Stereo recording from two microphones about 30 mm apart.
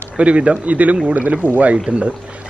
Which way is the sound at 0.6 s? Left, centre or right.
Right.